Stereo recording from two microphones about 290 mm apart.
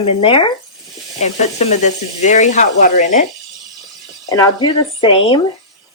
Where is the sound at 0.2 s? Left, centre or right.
Centre.